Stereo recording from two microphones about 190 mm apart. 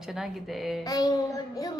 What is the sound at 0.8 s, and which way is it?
Speech, 20° left (ahead or behind).